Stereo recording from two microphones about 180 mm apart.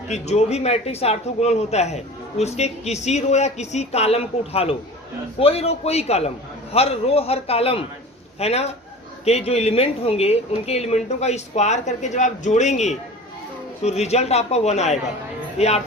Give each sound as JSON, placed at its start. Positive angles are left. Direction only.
{"t": 0.1, "sound": "speech", "side_deg": 35}